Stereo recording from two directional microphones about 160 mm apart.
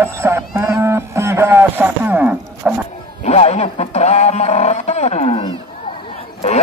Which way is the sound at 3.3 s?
40° left (ahead or behind).